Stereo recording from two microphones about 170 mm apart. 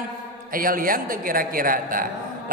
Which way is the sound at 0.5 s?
55° right (ahead or behind).